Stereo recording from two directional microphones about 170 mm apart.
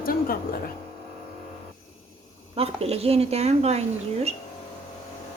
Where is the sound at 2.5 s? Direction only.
35° right (ahead or behind).